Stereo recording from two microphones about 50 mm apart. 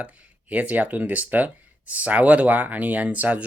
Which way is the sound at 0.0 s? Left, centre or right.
Right.